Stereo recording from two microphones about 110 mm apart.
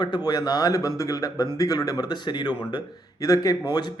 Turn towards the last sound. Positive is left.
turn(degrees=40)  # may be behind; listen again after turning